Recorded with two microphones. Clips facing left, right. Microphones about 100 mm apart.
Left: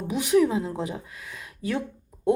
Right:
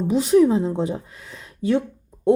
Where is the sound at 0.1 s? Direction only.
30° right (ahead or behind).